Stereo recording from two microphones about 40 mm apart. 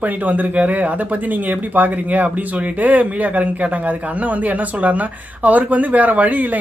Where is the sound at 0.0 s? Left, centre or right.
Right.